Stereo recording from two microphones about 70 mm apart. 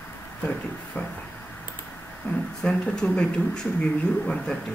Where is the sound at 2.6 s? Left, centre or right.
Centre.